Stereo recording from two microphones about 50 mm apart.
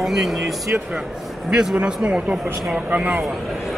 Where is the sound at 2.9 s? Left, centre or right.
Right.